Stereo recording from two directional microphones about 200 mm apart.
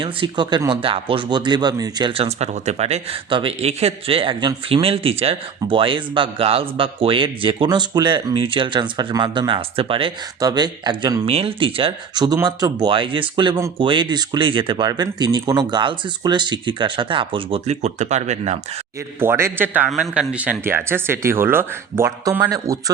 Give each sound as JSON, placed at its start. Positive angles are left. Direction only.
{"t": 0.0, "sound": "speech", "side_deg": -25}
{"t": 19.2, "sound": "speech", "side_deg": -10}